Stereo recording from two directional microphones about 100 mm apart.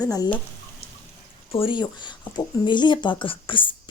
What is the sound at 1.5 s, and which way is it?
Speech, 55° left (ahead or behind).